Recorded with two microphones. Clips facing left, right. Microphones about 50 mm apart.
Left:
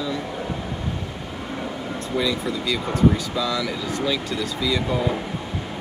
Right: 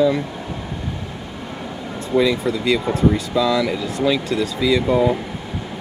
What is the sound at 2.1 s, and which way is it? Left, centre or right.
Speech, right.